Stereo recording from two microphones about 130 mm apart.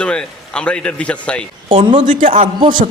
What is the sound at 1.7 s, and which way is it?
Speech, 40° right (ahead or behind).